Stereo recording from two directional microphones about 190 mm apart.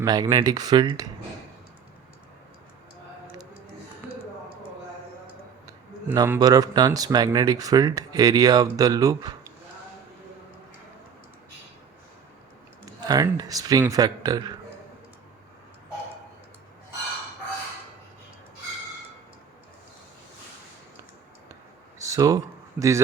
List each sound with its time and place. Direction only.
0.0 s speech: 20° right (ahead or behind)
5.6 s speech: 15° right (ahead or behind)
12.8 s speech: 20° right (ahead or behind)
21.9 s a sound: 15° right (ahead or behind)
22.8 s a man's voice: 10° right (ahead or behind)